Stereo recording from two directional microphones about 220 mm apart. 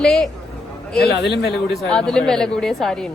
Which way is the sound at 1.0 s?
45° left (ahead or behind).